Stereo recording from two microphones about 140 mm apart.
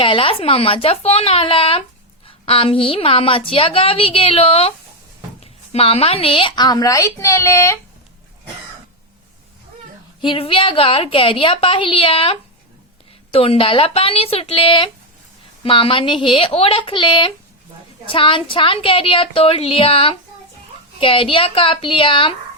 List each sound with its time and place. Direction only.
0.0 s a woman's voice: 40° left (ahead or behind); by 7.8 s 20° left (ahead or behind)
10.2 s a woman's voice: 40° left (ahead or behind)